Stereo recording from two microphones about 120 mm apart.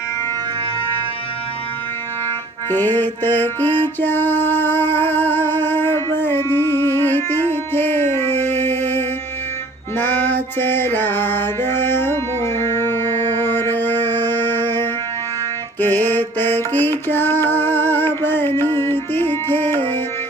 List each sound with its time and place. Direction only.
2.6 s music: 15° left (ahead or behind)